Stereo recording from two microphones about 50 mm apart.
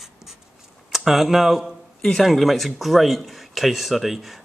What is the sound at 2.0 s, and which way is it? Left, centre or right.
A man's voice, centre.